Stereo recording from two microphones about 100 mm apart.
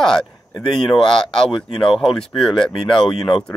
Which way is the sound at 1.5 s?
60° left (ahead or behind).